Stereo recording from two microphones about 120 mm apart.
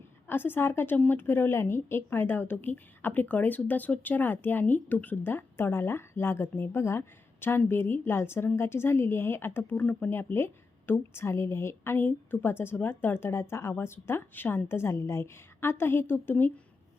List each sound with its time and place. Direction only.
0.3 s a woman's voice: 15° left (ahead or behind)